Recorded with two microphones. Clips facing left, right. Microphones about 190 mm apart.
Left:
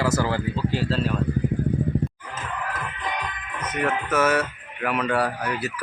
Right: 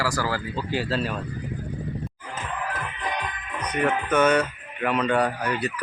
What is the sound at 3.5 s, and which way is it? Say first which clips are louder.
Music: right 1 dB; 5° left (ahead or behind).